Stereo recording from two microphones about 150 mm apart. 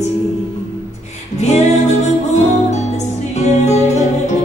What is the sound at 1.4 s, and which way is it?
Music, 50° left (ahead or behind).